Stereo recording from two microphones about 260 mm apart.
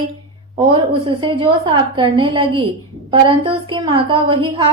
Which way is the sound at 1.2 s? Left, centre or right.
Centre.